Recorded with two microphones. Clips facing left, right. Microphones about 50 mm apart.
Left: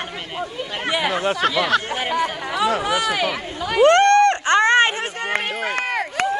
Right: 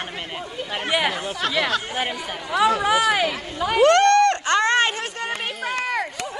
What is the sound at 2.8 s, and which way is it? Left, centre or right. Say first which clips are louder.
Speech: right 2 dB; right.